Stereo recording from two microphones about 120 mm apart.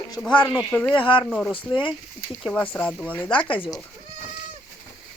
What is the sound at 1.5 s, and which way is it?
Speech, 45° left (ahead or behind).